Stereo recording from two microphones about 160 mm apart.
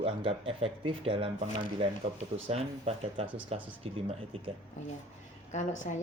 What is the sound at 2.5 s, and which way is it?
Speech, 40° right (ahead or behind).